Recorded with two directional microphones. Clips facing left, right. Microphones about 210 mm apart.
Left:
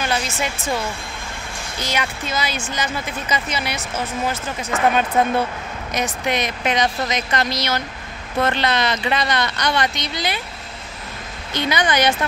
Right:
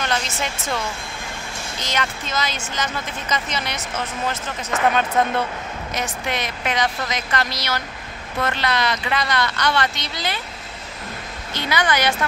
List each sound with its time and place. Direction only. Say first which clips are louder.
0.0 s speech: left 2 dB; 10° left (ahead or behind)
11.5 s speech: left 2 dB; 20° left (ahead or behind)